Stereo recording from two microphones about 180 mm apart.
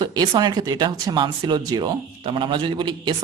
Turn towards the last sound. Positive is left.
turn(degrees=-25)  # may be behind; listen again after turning